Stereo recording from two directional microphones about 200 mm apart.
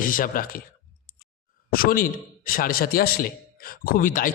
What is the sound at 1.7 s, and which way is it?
Speech, 45° left (ahead or behind).